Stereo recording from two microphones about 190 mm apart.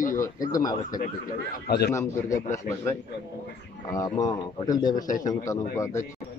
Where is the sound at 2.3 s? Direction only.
40° left (ahead or behind).